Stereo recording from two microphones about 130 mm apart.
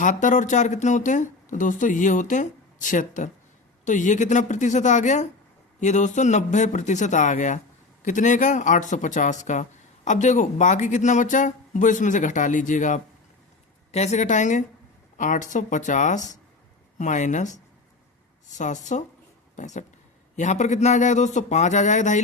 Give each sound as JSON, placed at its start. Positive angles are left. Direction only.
{"t": 0.0, "sound": "speech", "side_deg": 80}
{"t": 13.9, "sound": "speech", "side_deg": 60}
{"t": 18.5, "sound": "speech", "side_deg": 70}